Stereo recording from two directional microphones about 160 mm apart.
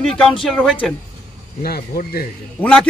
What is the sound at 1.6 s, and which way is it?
Speech, 70° left (ahead or behind).